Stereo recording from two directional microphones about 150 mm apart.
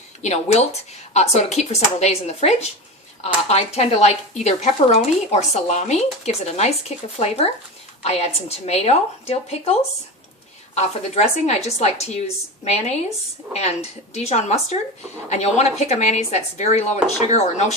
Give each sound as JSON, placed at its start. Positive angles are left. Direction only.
{"t": 0.2, "sound": "speech", "side_deg": 50}
{"t": 10.8, "sound": "speech", "side_deg": 50}
{"t": 13.5, "sound": "speech", "side_deg": 45}